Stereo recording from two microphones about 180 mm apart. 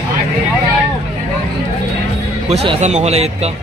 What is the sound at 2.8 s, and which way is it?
Speech, 40° right (ahead or behind).